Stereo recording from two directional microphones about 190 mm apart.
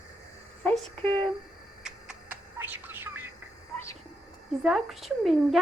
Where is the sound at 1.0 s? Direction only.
25° right (ahead or behind).